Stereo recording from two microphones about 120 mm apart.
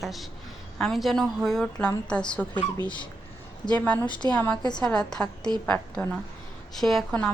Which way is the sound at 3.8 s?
10° left (ahead or behind).